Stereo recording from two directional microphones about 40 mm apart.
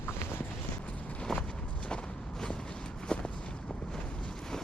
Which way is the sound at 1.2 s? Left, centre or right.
Left.